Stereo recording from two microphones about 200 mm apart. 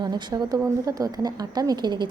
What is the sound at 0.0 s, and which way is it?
Speech, 20° right (ahead or behind).